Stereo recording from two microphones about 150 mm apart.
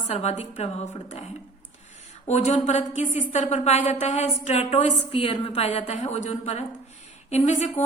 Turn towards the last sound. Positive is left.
turn(degrees=50)  # may be behind; listen again after turning